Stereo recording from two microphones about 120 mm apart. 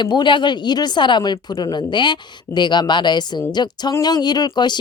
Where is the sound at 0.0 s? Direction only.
40° left (ahead or behind).